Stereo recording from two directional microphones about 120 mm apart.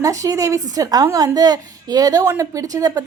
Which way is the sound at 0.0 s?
25° right (ahead or behind).